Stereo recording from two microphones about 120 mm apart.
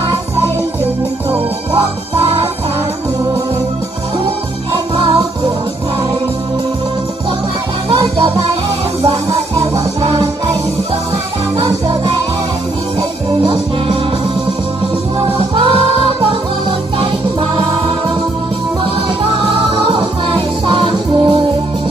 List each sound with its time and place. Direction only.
2.1 s music: 50° right (ahead or behind)
4.9 s music: 40° right (ahead or behind)
7.9 s music: 45° right (ahead or behind)
9.1 s music: 25° right (ahead or behind)
13.4 s music: 45° right (ahead or behind)
15.3 s music: 50° right (ahead or behind)
17.0 s music: 50° right (ahead or behind)
19.3 s music: 50° right (ahead or behind)